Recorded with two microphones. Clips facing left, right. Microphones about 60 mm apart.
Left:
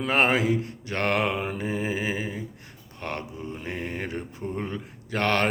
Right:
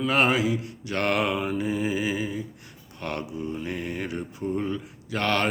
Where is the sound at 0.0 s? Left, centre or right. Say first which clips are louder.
Even; left.